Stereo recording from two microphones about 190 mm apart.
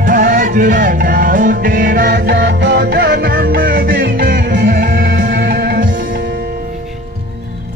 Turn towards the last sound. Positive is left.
turn(degrees=-45)  # may be behind; listen again after turning